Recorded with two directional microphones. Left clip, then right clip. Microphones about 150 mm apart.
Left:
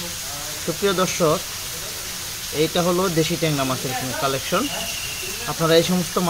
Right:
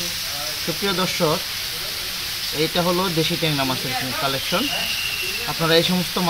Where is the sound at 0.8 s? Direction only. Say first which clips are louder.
Left 2 dB; 15° left (ahead or behind).